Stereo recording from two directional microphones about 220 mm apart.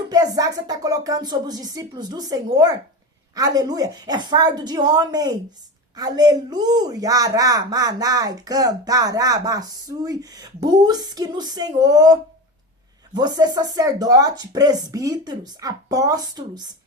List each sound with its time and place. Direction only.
0.1 s speech: 15° right (ahead or behind)